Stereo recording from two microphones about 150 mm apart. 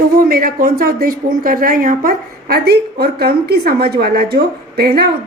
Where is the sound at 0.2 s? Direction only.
75° right (ahead or behind).